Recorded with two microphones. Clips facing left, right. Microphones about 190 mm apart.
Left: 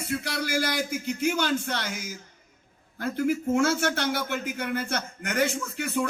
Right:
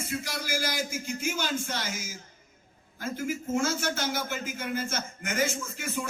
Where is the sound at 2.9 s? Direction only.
60° left (ahead or behind).